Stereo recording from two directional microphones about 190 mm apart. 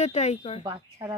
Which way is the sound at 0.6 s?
20° right (ahead or behind).